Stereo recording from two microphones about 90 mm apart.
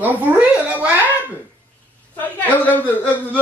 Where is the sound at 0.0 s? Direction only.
20° right (ahead or behind).